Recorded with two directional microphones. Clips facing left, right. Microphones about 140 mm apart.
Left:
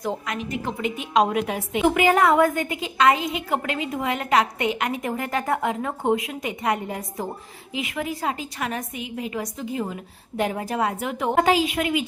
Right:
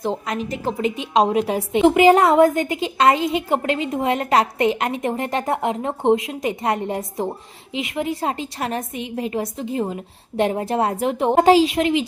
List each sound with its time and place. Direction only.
0.0 s a woman's voice: 30° right (ahead or behind)